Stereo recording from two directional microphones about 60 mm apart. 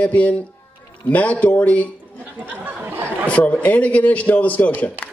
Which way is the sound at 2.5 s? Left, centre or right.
Right.